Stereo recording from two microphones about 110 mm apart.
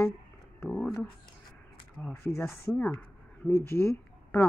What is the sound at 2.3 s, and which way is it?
Speech, 25° left (ahead or behind).